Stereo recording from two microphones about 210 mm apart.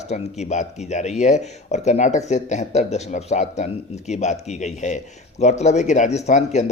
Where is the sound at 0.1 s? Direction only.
35° left (ahead or behind).